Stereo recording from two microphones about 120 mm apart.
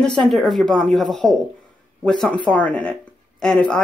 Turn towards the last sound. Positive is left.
turn(degrees=5)  # may be behind; listen again after turning